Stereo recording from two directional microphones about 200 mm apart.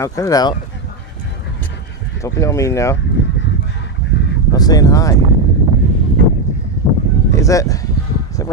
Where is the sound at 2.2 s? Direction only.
15° left (ahead or behind).